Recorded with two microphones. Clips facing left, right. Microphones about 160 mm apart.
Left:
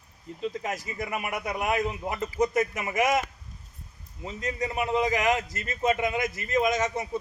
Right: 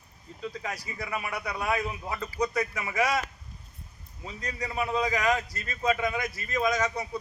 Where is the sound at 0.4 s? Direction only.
20° left (ahead or behind).